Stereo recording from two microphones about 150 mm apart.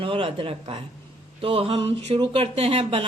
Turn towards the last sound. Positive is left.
turn(degrees=-40)  # may be behind; listen again after turning